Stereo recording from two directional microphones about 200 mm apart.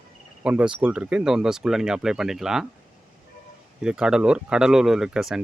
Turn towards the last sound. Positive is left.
turn(degrees=0)  # may be behind; listen again after turning